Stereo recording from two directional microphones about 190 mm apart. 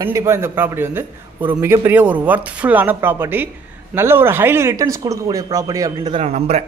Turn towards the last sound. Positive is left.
turn(degrees=-35)  # may be behind; listen again after turning